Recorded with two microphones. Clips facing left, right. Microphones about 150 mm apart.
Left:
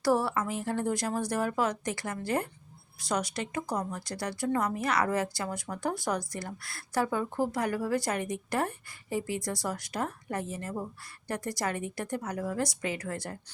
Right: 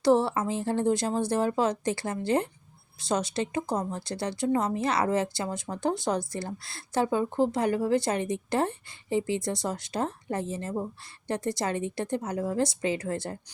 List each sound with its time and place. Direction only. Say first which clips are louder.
0.0 s speech: right 4 dB; 25° right (ahead or behind)